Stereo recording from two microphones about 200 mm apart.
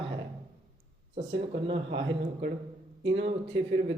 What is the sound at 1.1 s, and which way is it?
Speech, 25° right (ahead or behind).